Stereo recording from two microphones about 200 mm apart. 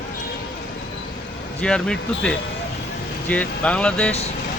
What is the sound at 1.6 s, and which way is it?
Speech, 5° left (ahead or behind).